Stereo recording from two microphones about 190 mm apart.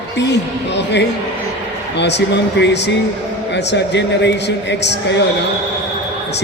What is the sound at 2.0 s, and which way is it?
A man's voice, 65° left (ahead or behind).